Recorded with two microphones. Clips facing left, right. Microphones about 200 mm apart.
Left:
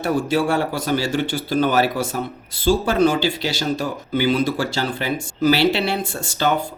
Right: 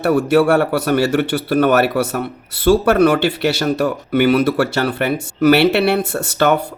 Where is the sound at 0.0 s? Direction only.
65° right (ahead or behind).